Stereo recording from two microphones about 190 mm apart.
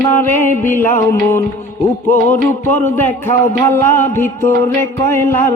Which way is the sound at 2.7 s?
10° left (ahead or behind).